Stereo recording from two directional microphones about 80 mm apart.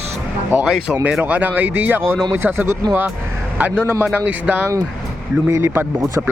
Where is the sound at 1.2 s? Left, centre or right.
Right.